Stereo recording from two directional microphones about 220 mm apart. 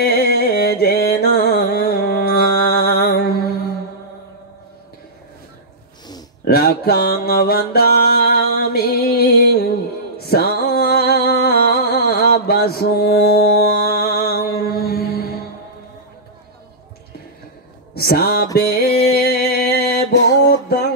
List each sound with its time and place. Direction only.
0.0 s music: 45° left (ahead or behind)
6.4 s mantra: 45° left (ahead or behind)
10.1 s music: 45° left (ahead or behind)
17.9 s music: 45° left (ahead or behind)
18.6 s a sound: 45° left (ahead or behind)
20.4 s music: 45° left (ahead or behind)